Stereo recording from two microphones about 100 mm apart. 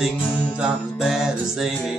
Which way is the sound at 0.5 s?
5° right (ahead or behind).